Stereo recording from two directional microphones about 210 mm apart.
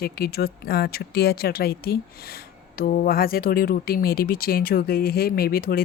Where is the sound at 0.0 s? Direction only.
50° left (ahead or behind).